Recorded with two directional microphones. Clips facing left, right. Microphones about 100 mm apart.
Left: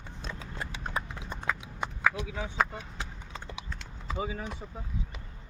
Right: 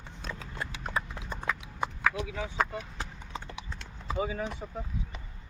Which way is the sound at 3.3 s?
15° right (ahead or behind).